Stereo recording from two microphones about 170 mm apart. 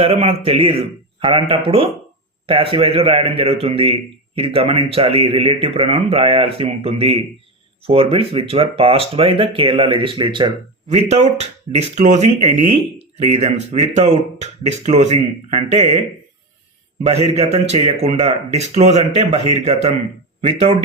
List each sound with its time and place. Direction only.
0.0 s speech: 35° right (ahead or behind)
10.8 s speech: 40° right (ahead or behind)
17.3 s speech: 40° right (ahead or behind)